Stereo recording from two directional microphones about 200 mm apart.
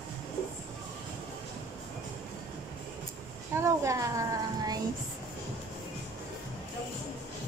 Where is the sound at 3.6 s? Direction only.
15° right (ahead or behind).